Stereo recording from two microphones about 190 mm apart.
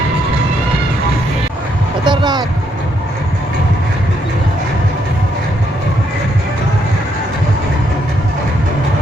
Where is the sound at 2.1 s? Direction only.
25° right (ahead or behind).